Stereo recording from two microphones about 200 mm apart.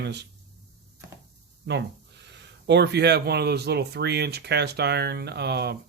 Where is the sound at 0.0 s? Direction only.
60° right (ahead or behind).